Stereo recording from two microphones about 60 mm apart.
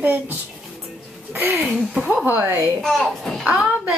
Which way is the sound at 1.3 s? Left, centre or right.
Right.